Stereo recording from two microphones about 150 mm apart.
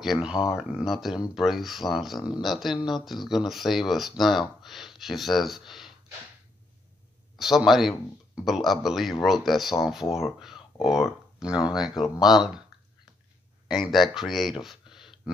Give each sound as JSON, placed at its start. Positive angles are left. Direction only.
{"t": 0.0, "sound": "speech", "side_deg": -5}
{"t": 7.3, "sound": "speech", "side_deg": 0}
{"t": 10.4, "sound": "a sound", "side_deg": 0}
{"t": 11.9, "sound": "speech", "side_deg": 25}
{"t": 13.7, "sound": "speech", "side_deg": 0}
{"t": 14.6, "sound": "a sound", "side_deg": 0}